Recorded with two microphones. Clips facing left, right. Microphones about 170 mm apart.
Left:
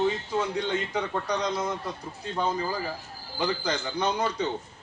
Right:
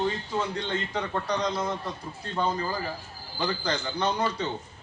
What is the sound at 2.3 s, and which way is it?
A man's voice, 10° left (ahead or behind).